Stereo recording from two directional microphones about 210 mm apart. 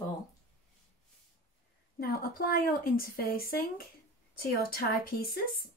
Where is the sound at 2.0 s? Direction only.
45° left (ahead or behind).